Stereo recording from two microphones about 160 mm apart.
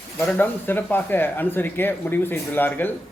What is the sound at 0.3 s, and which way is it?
Speech, 15° left (ahead or behind).